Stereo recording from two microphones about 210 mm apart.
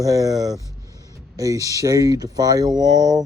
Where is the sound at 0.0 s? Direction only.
15° right (ahead or behind).